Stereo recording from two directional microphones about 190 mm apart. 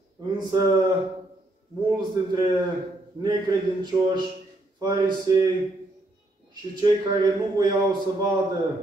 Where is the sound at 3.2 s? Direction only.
20° right (ahead or behind).